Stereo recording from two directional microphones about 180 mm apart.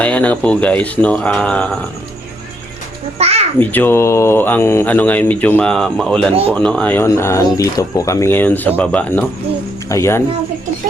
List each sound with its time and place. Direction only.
0.0 s speech: 10° left (ahead or behind)
3.2 s a child's voice: 35° right (ahead or behind)
3.6 s speech: 10° left (ahead or behind)